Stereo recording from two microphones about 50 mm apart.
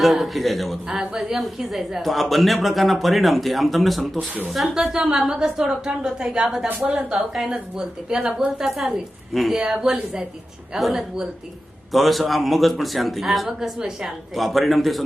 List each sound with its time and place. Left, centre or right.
0.0 s a woman's voice: centre
9.6 s a woman's voice: centre
10.8 s a woman's voice: centre